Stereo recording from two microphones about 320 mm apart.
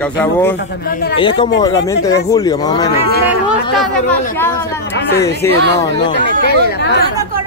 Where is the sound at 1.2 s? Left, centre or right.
Centre.